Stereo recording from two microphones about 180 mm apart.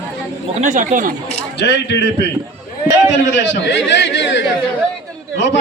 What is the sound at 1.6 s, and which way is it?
Speech, 75° left (ahead or behind).